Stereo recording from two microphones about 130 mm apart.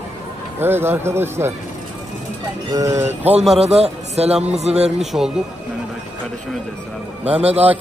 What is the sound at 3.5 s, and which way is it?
A man's voice, 55° right (ahead or behind).